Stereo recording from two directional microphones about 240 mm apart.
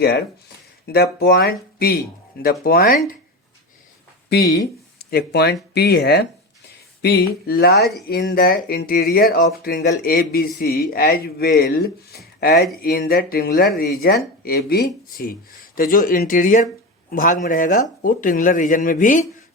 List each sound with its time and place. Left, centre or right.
0.0 s speech: left
4.3 s speech: left